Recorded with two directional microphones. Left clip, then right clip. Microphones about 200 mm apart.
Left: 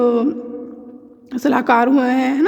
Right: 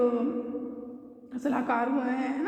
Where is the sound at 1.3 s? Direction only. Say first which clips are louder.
Left 14 dB; 50° left (ahead or behind).